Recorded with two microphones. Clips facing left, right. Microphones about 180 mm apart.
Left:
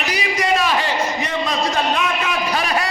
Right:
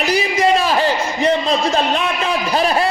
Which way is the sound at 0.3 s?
30° right (ahead or behind).